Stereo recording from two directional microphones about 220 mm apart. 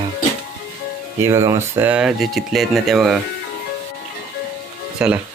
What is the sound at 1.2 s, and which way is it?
Speech, 10° right (ahead or behind).